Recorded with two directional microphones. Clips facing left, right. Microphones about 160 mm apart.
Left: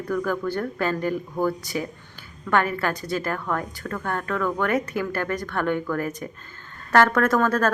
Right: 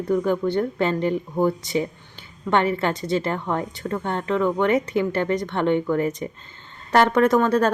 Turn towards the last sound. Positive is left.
turn(degrees=-20)  # may be behind; listen again after turning